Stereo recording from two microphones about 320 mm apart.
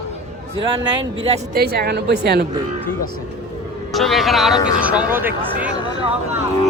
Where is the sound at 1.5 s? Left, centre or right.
Right.